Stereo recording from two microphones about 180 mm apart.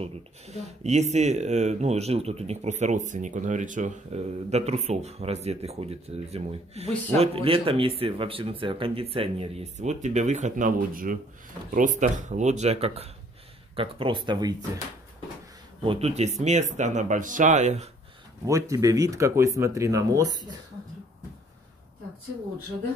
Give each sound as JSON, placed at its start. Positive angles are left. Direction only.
{"t": 0.0, "sound": "speech", "side_deg": -40}
{"t": 15.8, "sound": "speech", "side_deg": -30}
{"t": 18.4, "sound": "speech", "side_deg": -15}